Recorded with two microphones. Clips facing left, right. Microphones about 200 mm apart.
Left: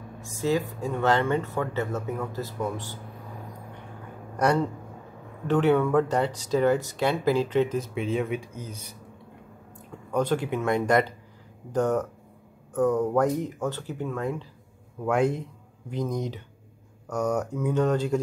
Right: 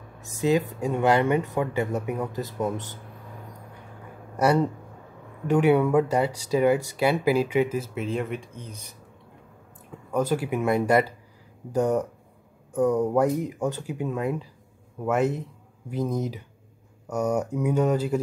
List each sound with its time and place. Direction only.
0.2 s speech: 20° right (ahead or behind)
5.5 s speech: 10° right (ahead or behind); by 8.9 s 5° left (ahead or behind)
9.8 s a man's voice: 5° right (ahead or behind)